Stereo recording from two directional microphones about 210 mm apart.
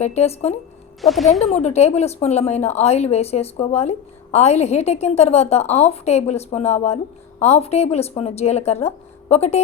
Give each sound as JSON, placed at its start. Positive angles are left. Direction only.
{"t": 0.0, "sound": "a woman's voice", "side_deg": 30}
{"t": 1.0, "sound": "speech", "side_deg": 0}
{"t": 1.5, "sound": "a woman's voice", "side_deg": 30}